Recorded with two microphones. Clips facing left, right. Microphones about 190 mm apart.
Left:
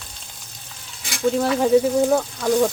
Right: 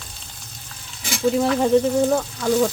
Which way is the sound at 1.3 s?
Centre (ahead or behind).